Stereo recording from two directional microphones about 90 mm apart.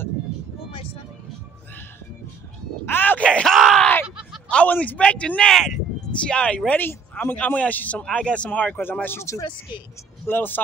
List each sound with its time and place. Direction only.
2.8 s a sound: 20° left (ahead or behind)
3.5 s groan: centre (ahead or behind)
4.5 s a man's voice: 15° left (ahead or behind)